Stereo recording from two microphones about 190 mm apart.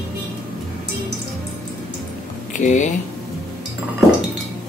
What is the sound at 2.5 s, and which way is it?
Speech, 40° left (ahead or behind).